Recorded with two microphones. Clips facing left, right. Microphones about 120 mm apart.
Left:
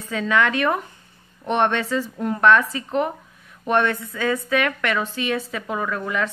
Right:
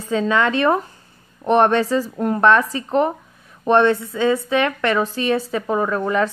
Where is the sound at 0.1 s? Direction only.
30° right (ahead or behind).